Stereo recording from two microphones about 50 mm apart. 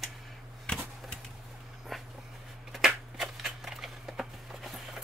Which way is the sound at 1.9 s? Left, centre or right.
Centre.